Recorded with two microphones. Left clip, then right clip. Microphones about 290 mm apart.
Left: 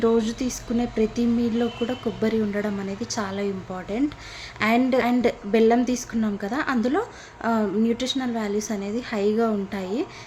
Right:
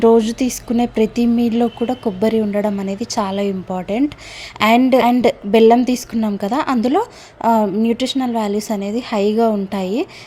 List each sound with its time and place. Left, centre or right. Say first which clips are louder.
0.0 s speech: right 9 dB; right